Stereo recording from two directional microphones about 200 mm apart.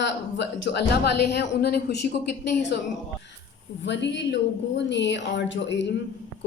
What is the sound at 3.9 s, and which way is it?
Speech, 60° left (ahead or behind).